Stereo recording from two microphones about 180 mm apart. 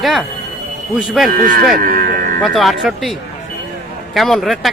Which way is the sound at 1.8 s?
50° right (ahead or behind).